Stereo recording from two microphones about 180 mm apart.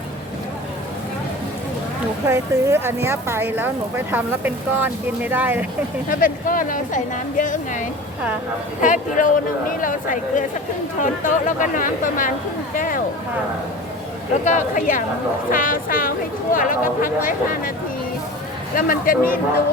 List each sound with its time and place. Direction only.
2.2 s speech: 15° right (ahead or behind)
6.1 s speech: 50° left (ahead or behind)
14.4 s speech: 45° left (ahead or behind)
18.8 s speech: 50° left (ahead or behind)